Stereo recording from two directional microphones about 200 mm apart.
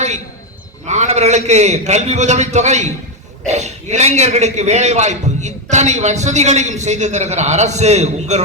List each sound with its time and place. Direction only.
0.9 s a man's voice: 35° right (ahead or behind)